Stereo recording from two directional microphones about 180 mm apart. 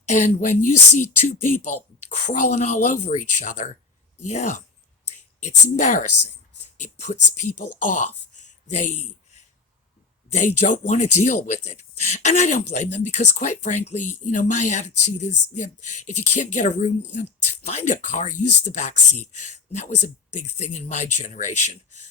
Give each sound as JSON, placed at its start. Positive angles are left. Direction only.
{"t": 0.0, "sound": "speech", "side_deg": 40}
{"t": 10.3, "sound": "speech", "side_deg": 40}